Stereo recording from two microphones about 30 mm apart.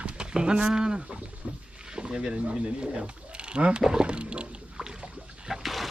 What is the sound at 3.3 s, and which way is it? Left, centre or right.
Mechanisms, right.